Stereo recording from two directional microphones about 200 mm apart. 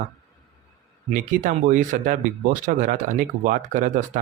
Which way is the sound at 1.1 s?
40° right (ahead or behind).